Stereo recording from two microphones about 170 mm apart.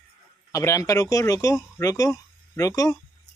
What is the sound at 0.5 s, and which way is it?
Speech, 20° left (ahead or behind).